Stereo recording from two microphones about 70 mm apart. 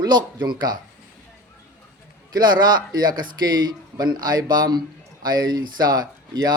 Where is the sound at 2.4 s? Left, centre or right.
Right.